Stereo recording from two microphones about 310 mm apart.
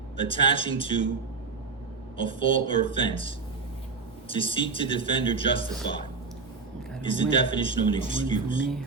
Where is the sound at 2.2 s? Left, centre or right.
Centre.